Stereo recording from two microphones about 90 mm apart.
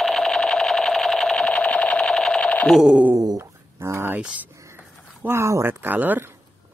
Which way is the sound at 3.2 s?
40° right (ahead or behind).